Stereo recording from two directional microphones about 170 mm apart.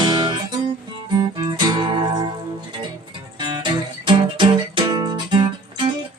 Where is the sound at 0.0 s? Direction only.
25° right (ahead or behind).